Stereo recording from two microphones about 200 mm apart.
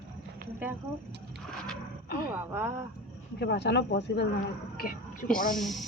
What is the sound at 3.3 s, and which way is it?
Speech, 55° left (ahead or behind).